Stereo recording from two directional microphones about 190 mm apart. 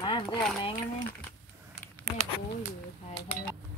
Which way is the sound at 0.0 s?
25° left (ahead or behind).